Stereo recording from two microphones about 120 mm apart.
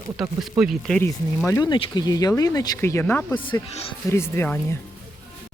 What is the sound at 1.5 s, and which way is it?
Speech, 25° left (ahead or behind).